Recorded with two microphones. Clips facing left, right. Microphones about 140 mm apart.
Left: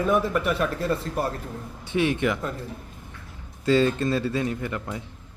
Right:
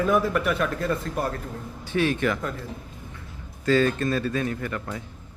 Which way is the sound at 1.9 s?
20° left (ahead or behind).